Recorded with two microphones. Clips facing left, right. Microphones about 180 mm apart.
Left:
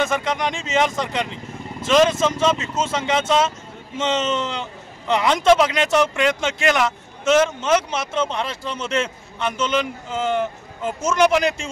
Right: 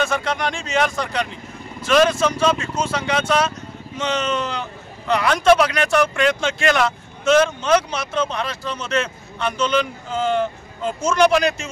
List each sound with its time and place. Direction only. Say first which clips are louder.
0.0 s speech: even; 15° left (ahead or behind)